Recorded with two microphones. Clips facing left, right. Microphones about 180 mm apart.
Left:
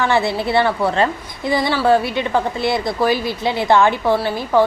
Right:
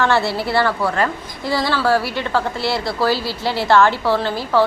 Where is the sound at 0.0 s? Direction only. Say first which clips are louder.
Even; 15° left (ahead or behind).